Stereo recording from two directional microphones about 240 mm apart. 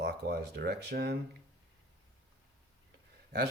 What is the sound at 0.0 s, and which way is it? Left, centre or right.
Speech, right.